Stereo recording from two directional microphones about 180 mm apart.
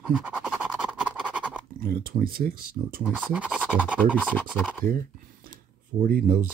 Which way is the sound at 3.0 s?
5° right (ahead or behind).